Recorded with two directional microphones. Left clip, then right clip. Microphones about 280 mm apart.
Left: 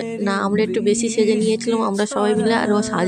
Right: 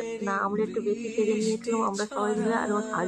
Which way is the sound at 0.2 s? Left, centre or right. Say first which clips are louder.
Left 8 dB; left.